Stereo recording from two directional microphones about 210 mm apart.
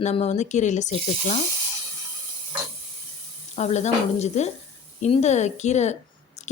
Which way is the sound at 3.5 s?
35° left (ahead or behind).